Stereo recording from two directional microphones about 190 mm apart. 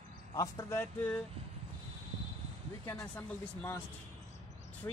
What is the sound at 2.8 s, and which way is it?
Speech, 10° left (ahead or behind).